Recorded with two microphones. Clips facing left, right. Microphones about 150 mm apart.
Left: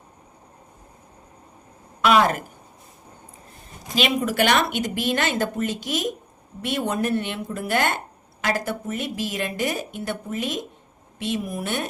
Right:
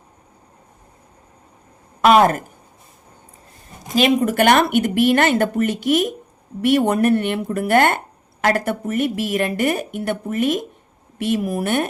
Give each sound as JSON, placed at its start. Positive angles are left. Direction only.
{"t": 2.0, "sound": "speech", "side_deg": -45}
{"t": 3.9, "sound": "speech", "side_deg": -50}